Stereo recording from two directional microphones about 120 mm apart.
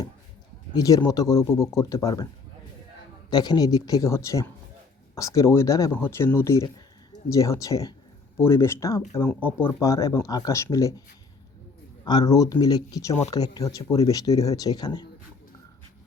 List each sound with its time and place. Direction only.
0.7 s speech: 30° left (ahead or behind)
3.2 s speech: 35° left (ahead or behind)
9.2 s speech: 15° left (ahead or behind); by 11.0 s 30° left (ahead or behind)
12.0 s speech: 35° left (ahead or behind)